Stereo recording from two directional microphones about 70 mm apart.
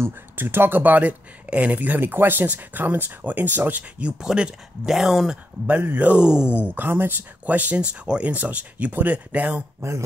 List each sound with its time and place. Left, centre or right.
0.0 s speech: right
4.2 s speech: centre
5.7 s speech: right
6.6 s speech: right
9.8 s speech: right